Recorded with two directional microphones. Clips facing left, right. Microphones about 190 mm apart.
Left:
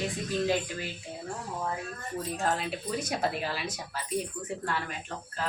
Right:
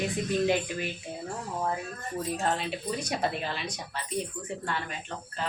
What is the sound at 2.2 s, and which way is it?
Speech, centre (ahead or behind).